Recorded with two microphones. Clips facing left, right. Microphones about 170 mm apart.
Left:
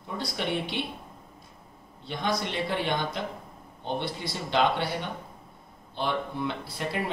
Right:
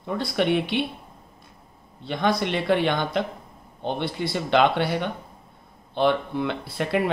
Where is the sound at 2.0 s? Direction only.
65° right (ahead or behind).